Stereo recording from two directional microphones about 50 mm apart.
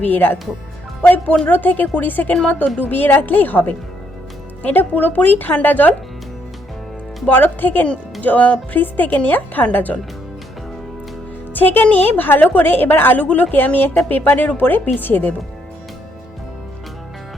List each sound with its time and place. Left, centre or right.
0.0 s a woman's voice: left
7.3 s a woman's voice: left
11.5 s a woman's voice: left
13.2 s a woman's voice: left
13.7 s a woman's voice: left